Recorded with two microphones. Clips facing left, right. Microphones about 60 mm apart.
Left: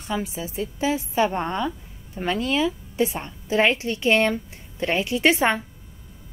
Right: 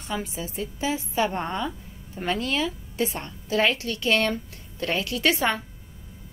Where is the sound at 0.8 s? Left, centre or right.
Centre.